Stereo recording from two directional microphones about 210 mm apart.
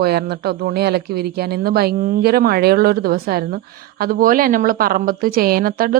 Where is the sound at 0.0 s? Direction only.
50° right (ahead or behind).